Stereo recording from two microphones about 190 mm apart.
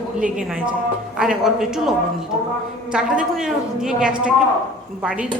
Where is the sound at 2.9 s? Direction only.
5° right (ahead or behind).